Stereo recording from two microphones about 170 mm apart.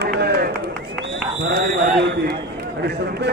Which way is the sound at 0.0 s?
70° right (ahead or behind).